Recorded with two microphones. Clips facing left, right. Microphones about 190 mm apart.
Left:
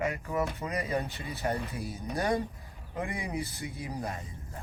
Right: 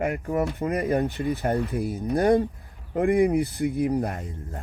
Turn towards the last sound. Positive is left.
turn(degrees=-55)  # may be behind; listen again after turning